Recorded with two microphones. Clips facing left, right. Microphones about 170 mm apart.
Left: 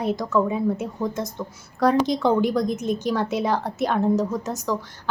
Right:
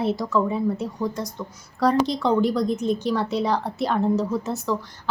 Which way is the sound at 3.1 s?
Centre (ahead or behind).